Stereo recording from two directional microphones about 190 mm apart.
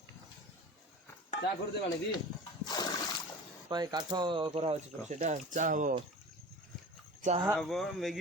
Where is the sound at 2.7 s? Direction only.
20° left (ahead or behind).